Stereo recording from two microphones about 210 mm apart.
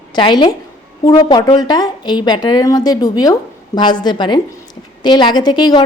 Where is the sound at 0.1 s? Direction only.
20° left (ahead or behind).